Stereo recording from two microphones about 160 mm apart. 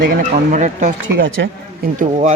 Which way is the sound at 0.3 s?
50° right (ahead or behind).